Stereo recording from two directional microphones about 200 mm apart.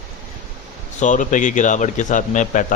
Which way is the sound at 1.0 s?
40° left (ahead or behind).